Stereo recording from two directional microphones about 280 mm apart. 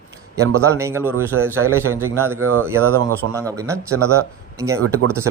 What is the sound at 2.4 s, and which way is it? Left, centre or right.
Speech, right.